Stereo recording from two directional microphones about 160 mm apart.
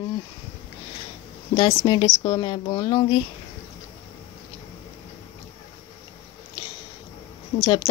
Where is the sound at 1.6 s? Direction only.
25° left (ahead or behind).